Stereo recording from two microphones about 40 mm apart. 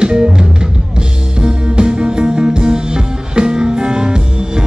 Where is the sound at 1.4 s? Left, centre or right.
Right.